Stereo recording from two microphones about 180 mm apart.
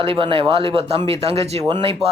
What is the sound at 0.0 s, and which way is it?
Speech, 30° right (ahead or behind).